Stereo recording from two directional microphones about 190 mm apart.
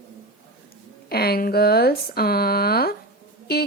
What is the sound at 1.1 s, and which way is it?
Speech, 55° left (ahead or behind).